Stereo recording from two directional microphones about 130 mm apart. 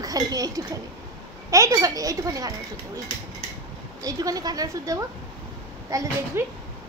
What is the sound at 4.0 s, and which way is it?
A child's voice, 30° right (ahead or behind).